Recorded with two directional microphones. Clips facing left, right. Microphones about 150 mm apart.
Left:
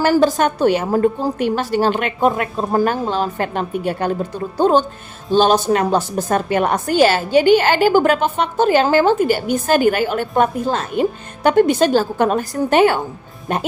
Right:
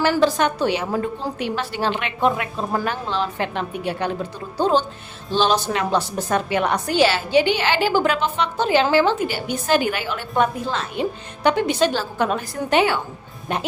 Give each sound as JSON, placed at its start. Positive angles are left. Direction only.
{"t": 0.0, "sound": "a woman's voice", "side_deg": 45}